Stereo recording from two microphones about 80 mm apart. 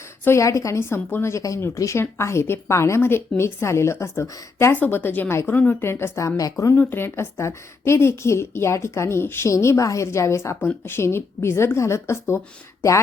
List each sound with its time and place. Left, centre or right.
0.3 s a woman's voice: left
4.7 s a woman's voice: left
6.7 s a woman's voice: left